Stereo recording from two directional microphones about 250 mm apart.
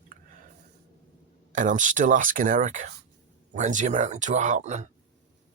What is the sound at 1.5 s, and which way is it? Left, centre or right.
Speech, right.